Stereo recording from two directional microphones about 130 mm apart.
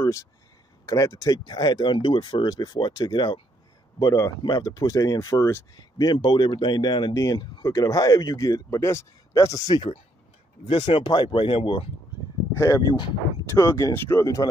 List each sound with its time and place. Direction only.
0.0 s a sound: 25° left (ahead or behind)
0.8 s speech: 25° left (ahead or behind)
5.8 s speech: 30° left (ahead or behind)
10.7 s speech: 45° left (ahead or behind)
12.5 s speech: 25° left (ahead or behind)